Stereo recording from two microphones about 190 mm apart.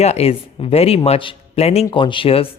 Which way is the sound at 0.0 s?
35° left (ahead or behind).